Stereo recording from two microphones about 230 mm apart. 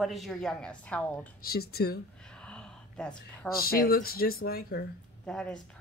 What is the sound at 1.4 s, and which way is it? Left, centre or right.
Speech, left.